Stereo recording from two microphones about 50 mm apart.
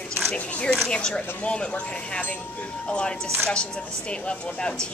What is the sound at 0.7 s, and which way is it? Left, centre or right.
Speech, centre.